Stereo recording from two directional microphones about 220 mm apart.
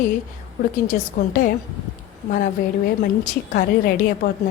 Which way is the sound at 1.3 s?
40° left (ahead or behind).